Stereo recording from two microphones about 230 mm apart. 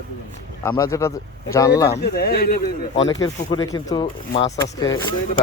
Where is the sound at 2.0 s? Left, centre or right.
Left.